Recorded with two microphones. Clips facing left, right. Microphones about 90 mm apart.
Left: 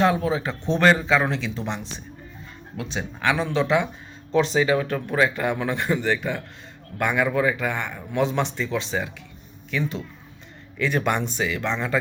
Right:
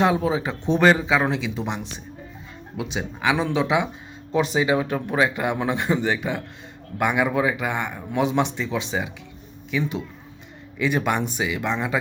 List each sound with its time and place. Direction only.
0.0 s speech: 15° right (ahead or behind)